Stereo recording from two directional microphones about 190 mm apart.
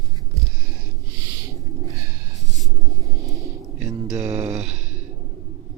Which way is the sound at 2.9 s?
15° right (ahead or behind).